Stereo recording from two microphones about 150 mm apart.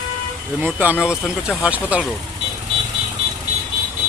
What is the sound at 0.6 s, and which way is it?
Speech, 10° right (ahead or behind).